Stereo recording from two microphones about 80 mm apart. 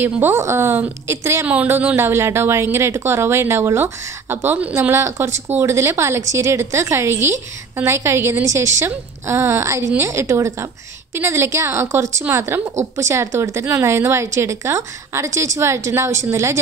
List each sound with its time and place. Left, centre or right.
0.0 s a woman's voice: right
1.4 s speech: right
2.0 s a woman's voice: right
4.9 s a woman's voice: right